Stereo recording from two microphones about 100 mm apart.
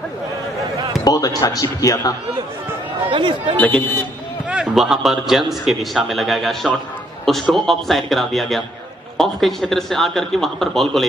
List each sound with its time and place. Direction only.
1.0 s speech: 35° left (ahead or behind)
3.1 s speech: 55° right (ahead or behind)
3.5 s speech: 15° left (ahead or behind)
4.5 s a man's voice: 5° right (ahead or behind)